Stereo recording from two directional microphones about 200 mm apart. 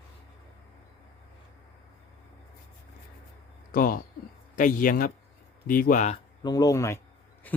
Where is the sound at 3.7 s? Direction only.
45° left (ahead or behind).